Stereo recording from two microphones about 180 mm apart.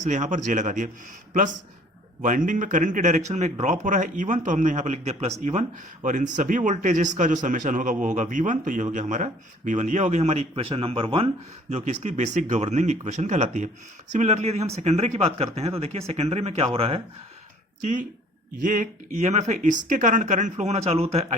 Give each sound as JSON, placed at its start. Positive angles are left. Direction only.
{"t": 0.0, "sound": "speech", "side_deg": -40}
{"t": 2.2, "sound": "speech", "side_deg": -45}
{"t": 18.6, "sound": "speech", "side_deg": -45}